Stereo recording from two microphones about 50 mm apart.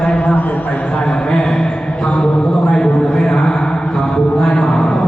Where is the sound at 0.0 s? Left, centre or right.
Left.